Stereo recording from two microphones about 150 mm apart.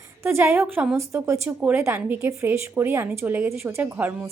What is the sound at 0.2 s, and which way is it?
Speech, 15° right (ahead or behind).